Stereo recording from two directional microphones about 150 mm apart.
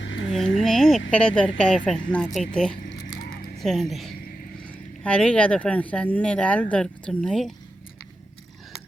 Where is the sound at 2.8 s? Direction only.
75° left (ahead or behind).